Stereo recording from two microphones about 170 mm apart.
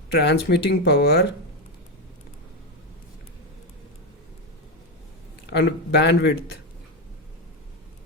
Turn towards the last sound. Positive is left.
turn(degrees=90)